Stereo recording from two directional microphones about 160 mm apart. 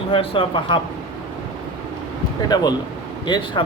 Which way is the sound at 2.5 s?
25° left (ahead or behind).